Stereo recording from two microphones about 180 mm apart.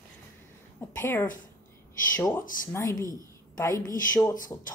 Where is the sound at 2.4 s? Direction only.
50° left (ahead or behind).